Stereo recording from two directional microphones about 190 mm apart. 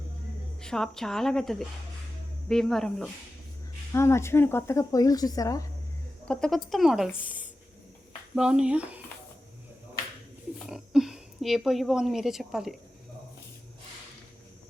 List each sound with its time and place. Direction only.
0.6 s a woman's voice: 5° left (ahead or behind)
3.9 s speech: 15° left (ahead or behind)
6.2 s a woman's voice: 5° left (ahead or behind)
8.4 s a woman's voice: 5° right (ahead or behind)
10.7 s a sound: 5° right (ahead or behind)